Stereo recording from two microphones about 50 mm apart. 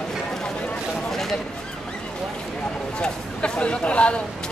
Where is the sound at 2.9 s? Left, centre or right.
Centre.